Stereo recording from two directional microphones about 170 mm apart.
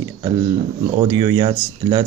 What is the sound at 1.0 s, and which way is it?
Speech, 25° right (ahead or behind).